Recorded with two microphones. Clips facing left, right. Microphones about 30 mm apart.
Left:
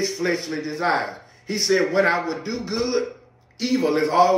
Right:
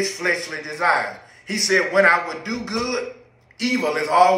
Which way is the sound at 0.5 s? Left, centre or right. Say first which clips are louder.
Right 2 dB; right.